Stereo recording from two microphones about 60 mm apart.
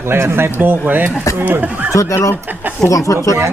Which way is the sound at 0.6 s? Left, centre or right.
Right.